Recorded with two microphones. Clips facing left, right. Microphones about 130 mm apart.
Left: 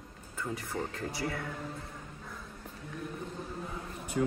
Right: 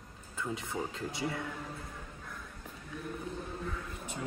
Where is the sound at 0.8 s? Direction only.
10° right (ahead or behind).